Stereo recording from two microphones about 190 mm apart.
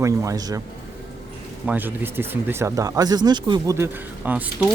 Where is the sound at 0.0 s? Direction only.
15° right (ahead or behind).